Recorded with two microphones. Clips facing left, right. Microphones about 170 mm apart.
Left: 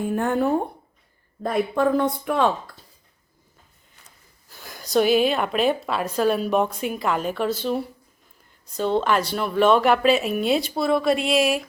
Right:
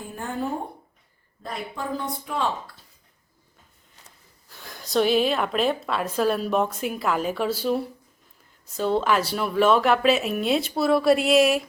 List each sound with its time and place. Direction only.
0.1 s a woman's voice: 65° left (ahead or behind)
2.7 s speech: 45° left (ahead or behind)
4.4 s speech: centre (ahead or behind)